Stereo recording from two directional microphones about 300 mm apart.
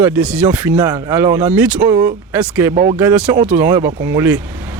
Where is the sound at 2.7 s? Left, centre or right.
Right.